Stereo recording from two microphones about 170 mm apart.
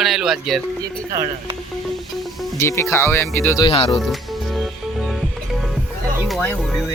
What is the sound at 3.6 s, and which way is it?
Speech, 35° left (ahead or behind).